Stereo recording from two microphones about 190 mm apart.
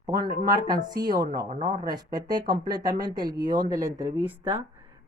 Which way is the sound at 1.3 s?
50° right (ahead or behind).